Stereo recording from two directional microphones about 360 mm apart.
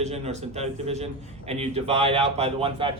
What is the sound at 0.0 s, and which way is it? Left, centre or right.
Speech, centre.